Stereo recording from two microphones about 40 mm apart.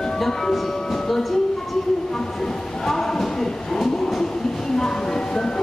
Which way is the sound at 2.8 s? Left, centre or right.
Centre.